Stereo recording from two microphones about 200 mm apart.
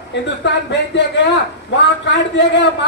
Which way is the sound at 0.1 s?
60° left (ahead or behind).